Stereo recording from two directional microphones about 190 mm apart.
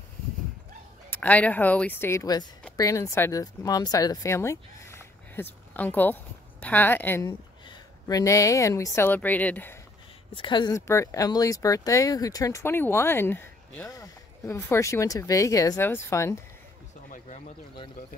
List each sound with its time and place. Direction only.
1.1 s speech: 10° left (ahead or behind)
10.3 s speech: 25° left (ahead or behind)